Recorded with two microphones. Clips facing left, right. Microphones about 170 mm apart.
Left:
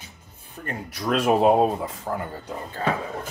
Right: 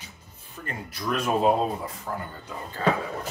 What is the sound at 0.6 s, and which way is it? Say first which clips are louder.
Speech: left 4 dB; 70° left (ahead or behind).